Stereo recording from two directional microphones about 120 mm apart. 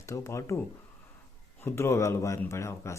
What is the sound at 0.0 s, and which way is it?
Speech, 25° left (ahead or behind).